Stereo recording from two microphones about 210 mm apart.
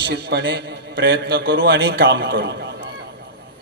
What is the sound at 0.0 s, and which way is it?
A man's voice, 55° right (ahead or behind).